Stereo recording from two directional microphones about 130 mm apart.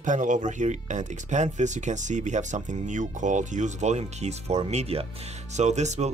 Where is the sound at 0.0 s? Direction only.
75° right (ahead or behind).